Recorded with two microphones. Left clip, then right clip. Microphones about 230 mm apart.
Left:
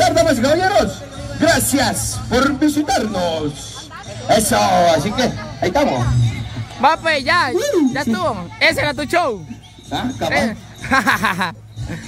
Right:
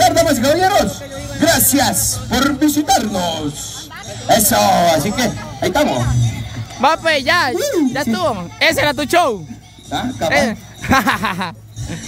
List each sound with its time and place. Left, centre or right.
0.0 s speech: right
6.8 s a man's voice: centre
11.1 s speech: centre